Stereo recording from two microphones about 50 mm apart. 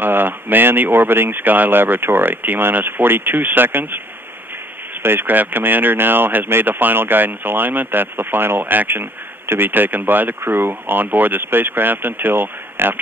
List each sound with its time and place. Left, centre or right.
0.0 s speech: right
5.0 s speech: right